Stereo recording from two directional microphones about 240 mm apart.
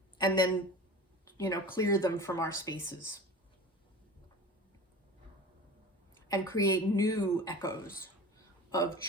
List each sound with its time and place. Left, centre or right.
0.2 s speech: centre
1.2 s a sound: centre
1.7 s speech: centre
6.2 s speech: centre